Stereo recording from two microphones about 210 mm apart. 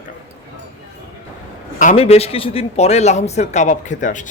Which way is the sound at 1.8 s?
35° left (ahead or behind).